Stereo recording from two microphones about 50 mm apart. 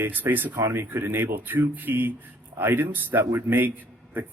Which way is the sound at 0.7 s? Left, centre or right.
Right.